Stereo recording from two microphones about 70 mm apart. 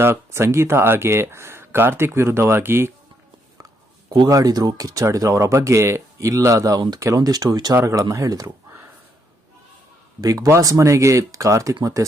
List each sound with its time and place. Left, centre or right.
0.0 s speech: right
4.1 s speech: right
5.5 s speech: right
7.7 s speech: right
10.2 s speech: right